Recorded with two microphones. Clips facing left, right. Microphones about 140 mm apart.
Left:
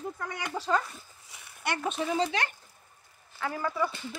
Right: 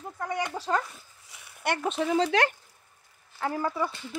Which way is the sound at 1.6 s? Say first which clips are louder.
Right 3 dB; 70° right (ahead or behind).